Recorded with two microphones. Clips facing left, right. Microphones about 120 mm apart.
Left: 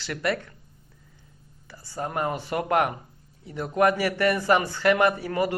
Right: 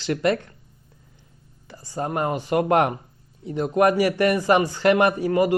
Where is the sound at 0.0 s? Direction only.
25° right (ahead or behind).